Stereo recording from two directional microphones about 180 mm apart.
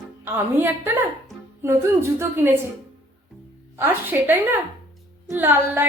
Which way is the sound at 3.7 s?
10° right (ahead or behind).